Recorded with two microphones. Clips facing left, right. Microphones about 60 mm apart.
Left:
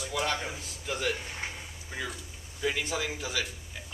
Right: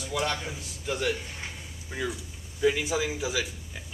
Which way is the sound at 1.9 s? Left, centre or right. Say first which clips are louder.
Right 5 dB; centre.